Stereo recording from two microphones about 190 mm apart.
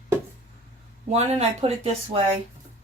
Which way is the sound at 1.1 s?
35° right (ahead or behind).